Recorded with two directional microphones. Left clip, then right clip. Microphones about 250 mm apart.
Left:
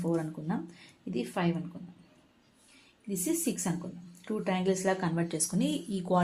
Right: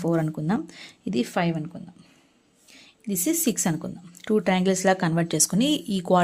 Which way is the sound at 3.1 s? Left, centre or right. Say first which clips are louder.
Right 7 dB; right.